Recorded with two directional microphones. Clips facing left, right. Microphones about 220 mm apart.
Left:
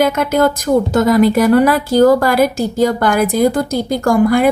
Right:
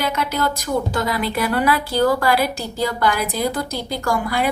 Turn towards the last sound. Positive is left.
turn(degrees=50)  # may be behind; listen again after turning